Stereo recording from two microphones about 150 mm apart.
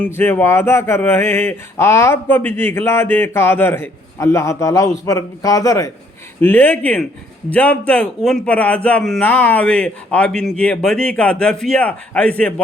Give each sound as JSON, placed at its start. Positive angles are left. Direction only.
{"t": 0.0, "sound": "speech", "side_deg": 15}